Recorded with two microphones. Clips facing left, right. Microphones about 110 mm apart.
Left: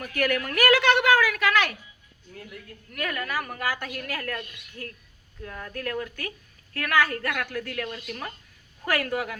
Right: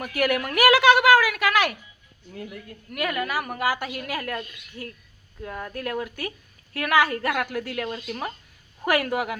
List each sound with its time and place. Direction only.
0.1 s a woman's voice: 10° right (ahead or behind)
2.3 s a woman's voice: 20° right (ahead or behind)
2.9 s a woman's voice: 10° right (ahead or behind)